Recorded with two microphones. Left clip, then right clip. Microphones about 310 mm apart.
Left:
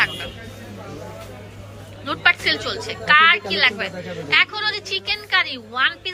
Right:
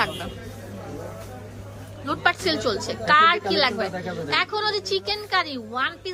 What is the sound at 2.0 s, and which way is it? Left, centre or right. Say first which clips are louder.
A woman's voice: left 4 dB; centre.